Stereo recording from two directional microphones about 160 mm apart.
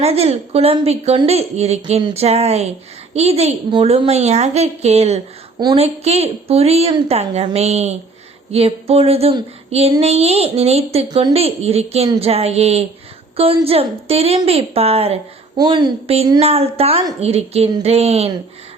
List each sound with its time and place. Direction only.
0.0 s a woman's voice: 40° right (ahead or behind)
15.5 s a woman's voice: 25° right (ahead or behind)
16.4 s a woman's voice: 40° right (ahead or behind)